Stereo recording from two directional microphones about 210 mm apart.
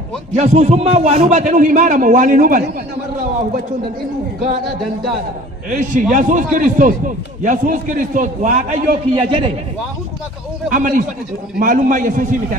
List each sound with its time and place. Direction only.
0.3 s a man's voice: 35° right (ahead or behind)
5.7 s a man's voice: 40° right (ahead or behind)
10.7 s a man's voice: 40° right (ahead or behind)